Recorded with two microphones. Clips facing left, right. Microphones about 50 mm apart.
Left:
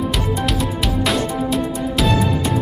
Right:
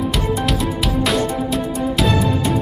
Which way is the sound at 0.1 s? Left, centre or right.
Centre.